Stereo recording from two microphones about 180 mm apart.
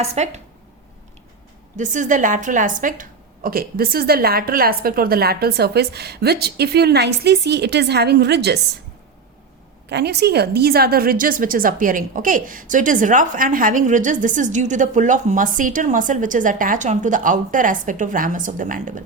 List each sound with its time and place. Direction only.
0.0 s speech: 35° right (ahead or behind)
1.7 s a woman's voice: 45° right (ahead or behind); by 8.5 s 65° right (ahead or behind)
9.9 s a woman's voice: 65° right (ahead or behind); by 19.0 s 45° right (ahead or behind)